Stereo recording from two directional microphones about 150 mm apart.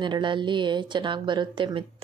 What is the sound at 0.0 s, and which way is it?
A woman's voice, 30° right (ahead or behind).